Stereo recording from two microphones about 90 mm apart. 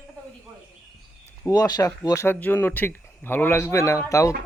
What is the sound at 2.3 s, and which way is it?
A man's voice, 20° left (ahead or behind).